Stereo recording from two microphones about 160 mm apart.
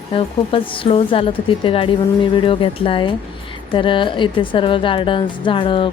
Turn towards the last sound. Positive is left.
turn(degrees=30)  # may be behind; listen again after turning